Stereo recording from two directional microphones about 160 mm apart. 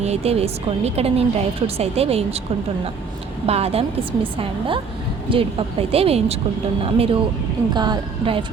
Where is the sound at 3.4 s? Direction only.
40° right (ahead or behind).